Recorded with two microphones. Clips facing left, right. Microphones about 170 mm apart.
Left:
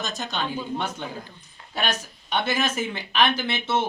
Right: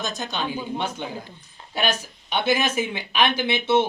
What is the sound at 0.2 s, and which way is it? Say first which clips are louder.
Speech: right 1 dB; 5° right (ahead or behind).